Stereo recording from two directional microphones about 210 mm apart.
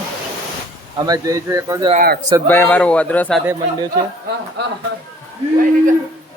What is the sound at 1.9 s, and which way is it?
Speech, 45° right (ahead or behind).